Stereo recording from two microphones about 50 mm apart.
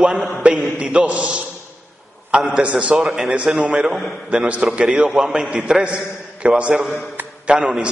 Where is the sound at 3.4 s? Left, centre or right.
Centre.